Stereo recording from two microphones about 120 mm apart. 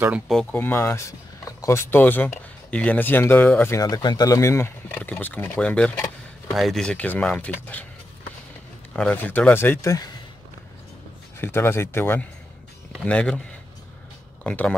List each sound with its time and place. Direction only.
0.5 s speech: 20° left (ahead or behind)
8.9 s speech: 10° left (ahead or behind)
11.3 s speech: 20° left (ahead or behind)
14.4 s speech: 15° left (ahead or behind)